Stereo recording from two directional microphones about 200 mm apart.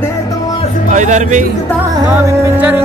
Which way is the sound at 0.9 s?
35° right (ahead or behind).